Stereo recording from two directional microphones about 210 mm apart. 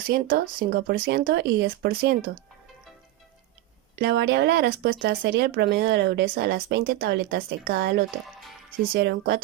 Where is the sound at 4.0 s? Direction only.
50° right (ahead or behind).